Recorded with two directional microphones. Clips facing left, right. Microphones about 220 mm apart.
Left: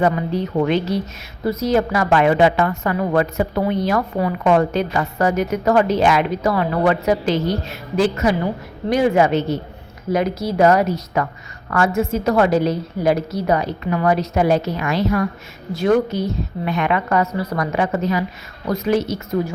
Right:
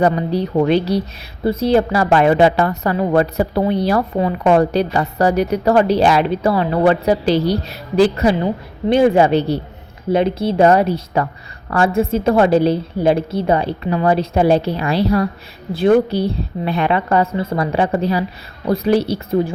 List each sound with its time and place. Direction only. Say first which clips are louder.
0.0 s a woman's voice: right 3 dB; 35° right (ahead or behind)